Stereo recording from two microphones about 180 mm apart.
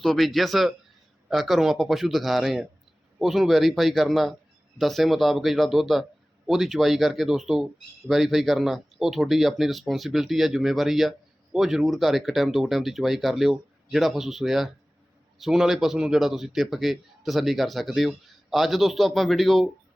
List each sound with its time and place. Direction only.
0.0 s speech: centre (ahead or behind)